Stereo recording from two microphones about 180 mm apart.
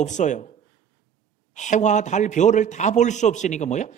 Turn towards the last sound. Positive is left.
turn(degrees=40)  # may be behind; listen again after turning